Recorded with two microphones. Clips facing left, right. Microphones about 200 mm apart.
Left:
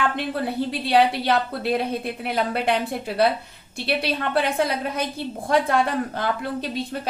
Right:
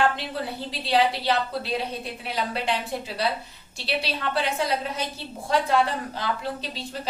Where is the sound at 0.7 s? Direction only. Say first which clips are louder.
Left 3 dB; 55° left (ahead or behind).